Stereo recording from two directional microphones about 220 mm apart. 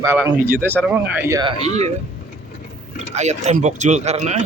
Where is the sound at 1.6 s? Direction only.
30° right (ahead or behind).